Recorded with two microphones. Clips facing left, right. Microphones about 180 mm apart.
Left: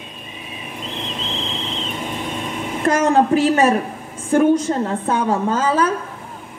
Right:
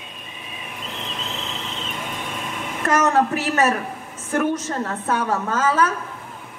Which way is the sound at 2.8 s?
30° left (ahead or behind).